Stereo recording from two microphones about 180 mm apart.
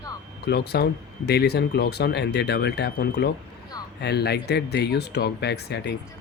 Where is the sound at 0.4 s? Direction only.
65° left (ahead or behind).